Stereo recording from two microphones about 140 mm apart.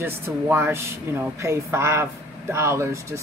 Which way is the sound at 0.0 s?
15° right (ahead or behind).